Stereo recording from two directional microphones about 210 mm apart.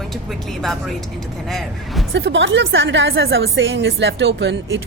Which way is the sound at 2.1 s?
60° right (ahead or behind).